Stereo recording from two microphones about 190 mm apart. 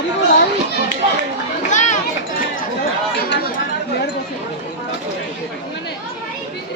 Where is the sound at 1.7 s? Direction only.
40° left (ahead or behind).